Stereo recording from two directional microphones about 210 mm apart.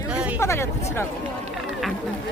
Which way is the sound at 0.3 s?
15° left (ahead or behind).